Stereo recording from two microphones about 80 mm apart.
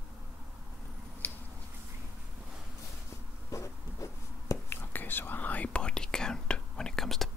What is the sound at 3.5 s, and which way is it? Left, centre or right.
Writing, left.